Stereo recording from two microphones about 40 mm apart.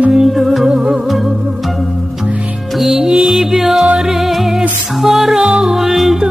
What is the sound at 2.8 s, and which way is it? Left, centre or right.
Music, centre.